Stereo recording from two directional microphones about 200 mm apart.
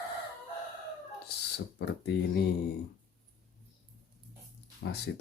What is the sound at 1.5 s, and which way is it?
Speech, 55° left (ahead or behind).